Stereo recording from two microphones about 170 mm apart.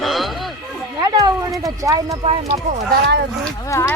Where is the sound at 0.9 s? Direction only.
20° right (ahead or behind).